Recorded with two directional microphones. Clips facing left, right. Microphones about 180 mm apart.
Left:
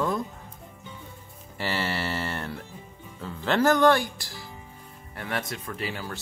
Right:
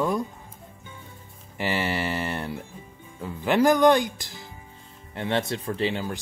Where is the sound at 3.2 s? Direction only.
15° right (ahead or behind).